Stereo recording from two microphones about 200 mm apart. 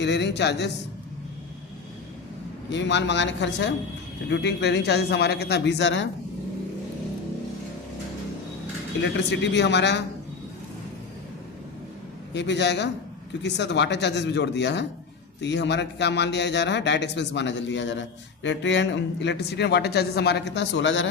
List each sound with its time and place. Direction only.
0.0 s a man's voice: 60° left (ahead or behind)
2.6 s a man's voice: 60° left (ahead or behind)
9.0 s a man's voice: 60° left (ahead or behind)
12.3 s a man's voice: 60° left (ahead or behind)